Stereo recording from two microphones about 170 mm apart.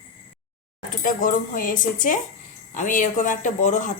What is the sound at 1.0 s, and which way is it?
A woman's voice, 50° left (ahead or behind).